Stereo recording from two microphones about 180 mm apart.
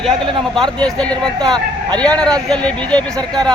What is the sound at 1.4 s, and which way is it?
Speech, 25° right (ahead or behind).